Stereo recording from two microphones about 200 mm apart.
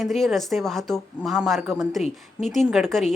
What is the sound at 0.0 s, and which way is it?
Speech, centre (ahead or behind).